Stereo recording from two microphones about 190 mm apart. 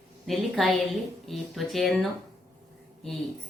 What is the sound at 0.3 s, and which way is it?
Speech, centre (ahead or behind).